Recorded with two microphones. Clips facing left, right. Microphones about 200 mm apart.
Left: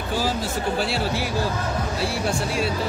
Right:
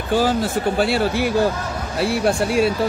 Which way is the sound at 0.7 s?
55° right (ahead or behind).